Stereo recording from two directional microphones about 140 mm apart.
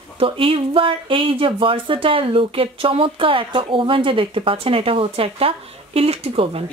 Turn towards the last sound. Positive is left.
turn(degrees=-45)  # may be behind; listen again after turning